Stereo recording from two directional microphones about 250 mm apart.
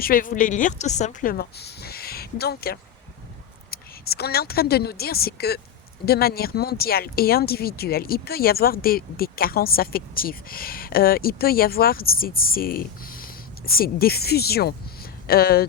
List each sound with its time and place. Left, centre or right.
0.0 s speech: left